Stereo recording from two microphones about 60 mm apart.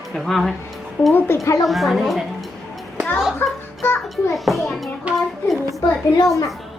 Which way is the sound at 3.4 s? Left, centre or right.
Left.